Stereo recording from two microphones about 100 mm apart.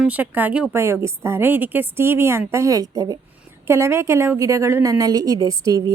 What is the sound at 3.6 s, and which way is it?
A woman's voice, 25° right (ahead or behind).